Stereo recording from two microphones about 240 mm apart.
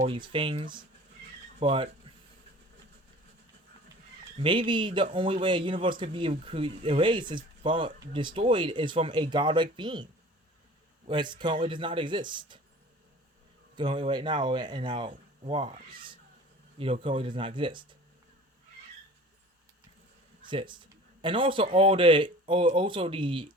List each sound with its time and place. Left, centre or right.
0.0 s speech: centre
4.4 s speech: centre
13.7 s speech: centre
20.4 s speech: centre